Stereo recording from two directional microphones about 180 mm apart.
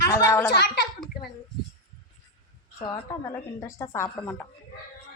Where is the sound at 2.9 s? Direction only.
20° left (ahead or behind).